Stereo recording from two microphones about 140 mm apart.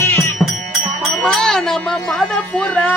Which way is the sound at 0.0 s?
20° left (ahead or behind).